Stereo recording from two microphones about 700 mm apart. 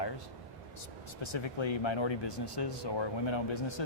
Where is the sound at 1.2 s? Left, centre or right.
Left.